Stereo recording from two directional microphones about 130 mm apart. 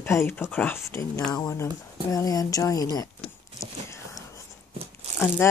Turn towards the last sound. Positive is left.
turn(degrees=20)  # may be behind; listen again after turning